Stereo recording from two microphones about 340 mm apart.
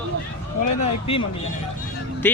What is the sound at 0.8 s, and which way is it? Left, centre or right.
Speech, centre.